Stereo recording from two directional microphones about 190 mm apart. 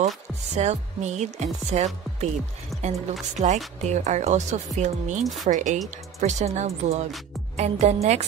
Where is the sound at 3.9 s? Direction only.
40° right (ahead or behind).